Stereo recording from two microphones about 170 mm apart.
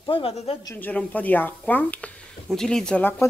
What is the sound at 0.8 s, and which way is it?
Speech, 10° left (ahead or behind).